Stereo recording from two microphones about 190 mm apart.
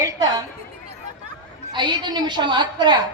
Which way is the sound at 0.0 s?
20° right (ahead or behind).